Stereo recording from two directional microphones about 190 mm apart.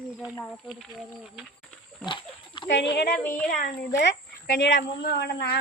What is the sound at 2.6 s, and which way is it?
Speech, 65° left (ahead or behind).